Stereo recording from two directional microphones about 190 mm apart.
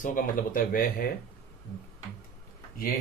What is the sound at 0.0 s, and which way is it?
Speech, 45° left (ahead or behind).